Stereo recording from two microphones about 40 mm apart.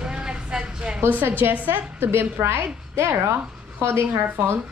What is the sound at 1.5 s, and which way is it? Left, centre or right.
Speech, right.